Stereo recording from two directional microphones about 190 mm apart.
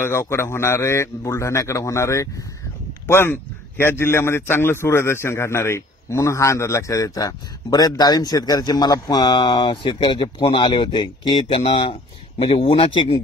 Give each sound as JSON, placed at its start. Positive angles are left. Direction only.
{"t": 0.0, "sound": "a man's voice", "side_deg": 15}